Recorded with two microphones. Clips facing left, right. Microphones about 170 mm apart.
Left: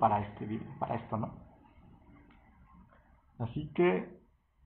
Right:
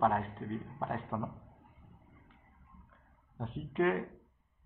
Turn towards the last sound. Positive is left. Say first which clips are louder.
# left 3 dB
turn(degrees=20)  # may be behind; listen again after turning